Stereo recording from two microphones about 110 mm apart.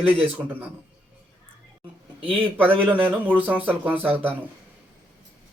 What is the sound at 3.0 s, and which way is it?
Speech, 15° right (ahead or behind).